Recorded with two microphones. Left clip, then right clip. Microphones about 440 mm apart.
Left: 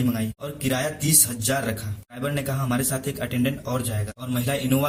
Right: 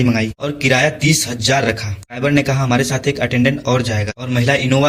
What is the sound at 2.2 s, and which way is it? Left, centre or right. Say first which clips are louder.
Speech: right 12 dB; left.